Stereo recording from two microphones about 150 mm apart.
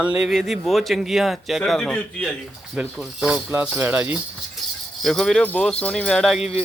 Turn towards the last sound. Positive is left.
turn(degrees=5)  # may be behind; listen again after turning